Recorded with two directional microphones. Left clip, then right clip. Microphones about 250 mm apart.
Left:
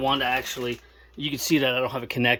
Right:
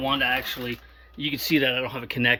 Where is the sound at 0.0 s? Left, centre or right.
Left.